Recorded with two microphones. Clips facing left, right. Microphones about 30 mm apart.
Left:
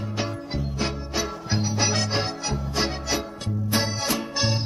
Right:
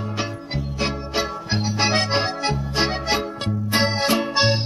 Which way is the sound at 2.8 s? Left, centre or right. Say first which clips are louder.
Right 4 dB; right.